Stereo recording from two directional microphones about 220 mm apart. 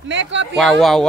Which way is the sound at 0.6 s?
Centre (ahead or behind).